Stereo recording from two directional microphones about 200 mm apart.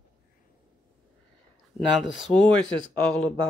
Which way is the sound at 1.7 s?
Centre (ahead or behind).